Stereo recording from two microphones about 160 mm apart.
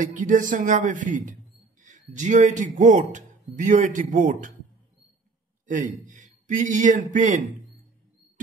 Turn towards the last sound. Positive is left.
turn(degrees=-50)  # may be behind; listen again after turning